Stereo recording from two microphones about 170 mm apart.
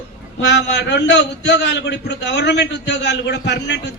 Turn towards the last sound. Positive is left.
turn(degrees=90)